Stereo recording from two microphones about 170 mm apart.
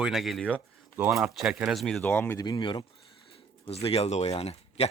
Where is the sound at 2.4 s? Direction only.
25° left (ahead or behind).